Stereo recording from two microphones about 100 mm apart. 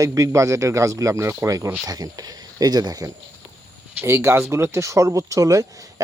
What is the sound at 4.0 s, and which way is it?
Speech, 25° right (ahead or behind).